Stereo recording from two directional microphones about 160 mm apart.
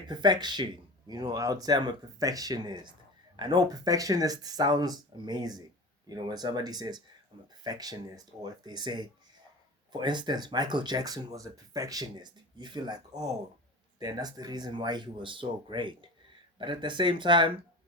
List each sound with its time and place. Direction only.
0.1 s speech: 25° right (ahead or behind)